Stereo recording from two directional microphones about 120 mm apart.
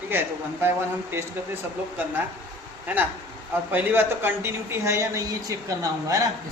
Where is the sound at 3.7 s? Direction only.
15° right (ahead or behind).